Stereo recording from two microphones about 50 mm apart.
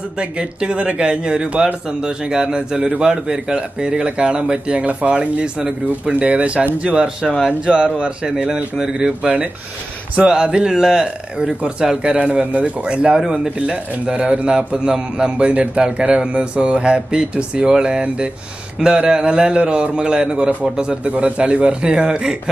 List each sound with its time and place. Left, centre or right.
0.2 s speech: right
6.1 s speech: right; by 9.1 s centre
9.2 s speech: right
13.6 s speech: right
21.0 s speech: right